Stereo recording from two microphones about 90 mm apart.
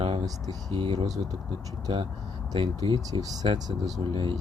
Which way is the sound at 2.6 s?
70° right (ahead or behind).